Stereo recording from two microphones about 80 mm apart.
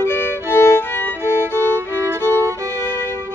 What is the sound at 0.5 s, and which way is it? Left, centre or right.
Music, left.